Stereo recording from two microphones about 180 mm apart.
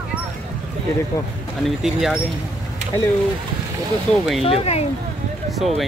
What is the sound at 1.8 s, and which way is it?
Speech, centre (ahead or behind).